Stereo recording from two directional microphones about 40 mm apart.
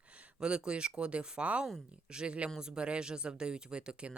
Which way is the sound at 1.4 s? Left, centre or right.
Right.